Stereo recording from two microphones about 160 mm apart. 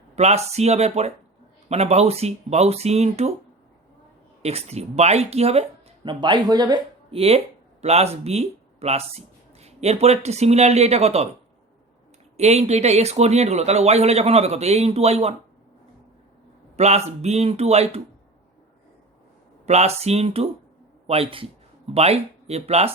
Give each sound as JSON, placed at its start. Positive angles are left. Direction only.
{"t": 0.2, "sound": "speech", "side_deg": -40}
{"t": 4.4, "sound": "speech", "side_deg": -40}
{"t": 6.1, "sound": "speech", "side_deg": -30}
{"t": 7.2, "sound": "speech", "side_deg": -40}
{"t": 12.4, "sound": "speech", "side_deg": -45}
{"t": 16.7, "sound": "speech", "side_deg": -45}
{"t": 19.6, "sound": "speech", "side_deg": -45}